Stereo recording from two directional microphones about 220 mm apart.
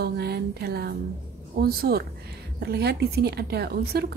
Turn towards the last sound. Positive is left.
turn(degrees=-45)  # may be behind; listen again after turning